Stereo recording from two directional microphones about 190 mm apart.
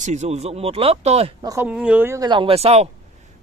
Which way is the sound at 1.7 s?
5° right (ahead or behind).